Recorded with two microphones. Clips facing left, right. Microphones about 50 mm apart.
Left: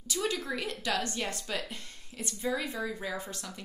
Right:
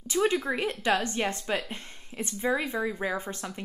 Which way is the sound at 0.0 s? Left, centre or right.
Right.